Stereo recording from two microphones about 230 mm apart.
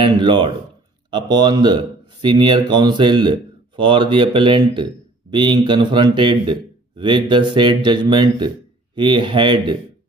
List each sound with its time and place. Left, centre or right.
0.0 s a man's voice: right